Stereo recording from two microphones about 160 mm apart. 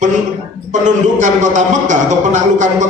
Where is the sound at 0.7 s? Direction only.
50° right (ahead or behind).